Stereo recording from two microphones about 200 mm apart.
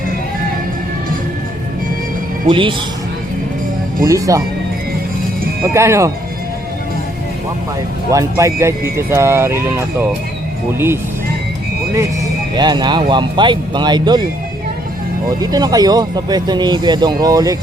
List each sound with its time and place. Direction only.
2.5 s speech: 25° right (ahead or behind)
4.0 s speech: 15° right (ahead or behind)
5.7 s speech: 15° right (ahead or behind)
8.1 s speech: 15° right (ahead or behind)
12.5 s speech: 20° right (ahead or behind)
15.4 s speech: 20° right (ahead or behind)